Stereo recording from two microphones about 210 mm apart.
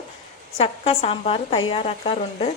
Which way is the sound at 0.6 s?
30° left (ahead or behind).